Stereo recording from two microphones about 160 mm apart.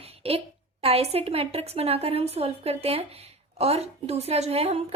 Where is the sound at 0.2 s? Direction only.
35° right (ahead or behind).